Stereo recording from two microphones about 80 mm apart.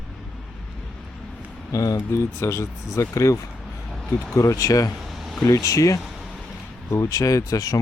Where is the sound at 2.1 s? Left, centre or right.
Left.